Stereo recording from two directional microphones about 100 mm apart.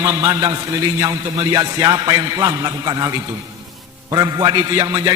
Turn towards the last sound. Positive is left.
turn(degrees=-40)  # may be behind; listen again after turning